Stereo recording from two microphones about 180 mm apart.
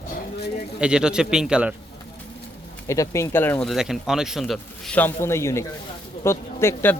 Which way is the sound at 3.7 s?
Centre (ahead or behind).